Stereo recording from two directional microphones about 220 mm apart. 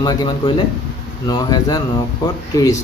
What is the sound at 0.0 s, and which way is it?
Speech, 20° left (ahead or behind).